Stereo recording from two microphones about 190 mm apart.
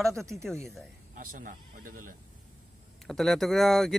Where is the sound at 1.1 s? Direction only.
45° right (ahead or behind).